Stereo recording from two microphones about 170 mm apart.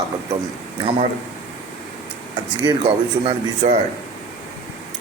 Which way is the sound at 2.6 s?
30° right (ahead or behind).